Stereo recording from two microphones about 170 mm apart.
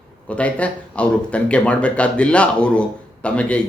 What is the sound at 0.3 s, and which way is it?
Speech, 5° left (ahead or behind).